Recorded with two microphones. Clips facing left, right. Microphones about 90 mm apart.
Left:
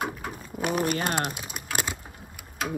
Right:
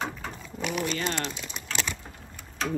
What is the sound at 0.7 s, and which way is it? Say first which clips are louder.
Speech: left 3 dB; 50° left (ahead or behind).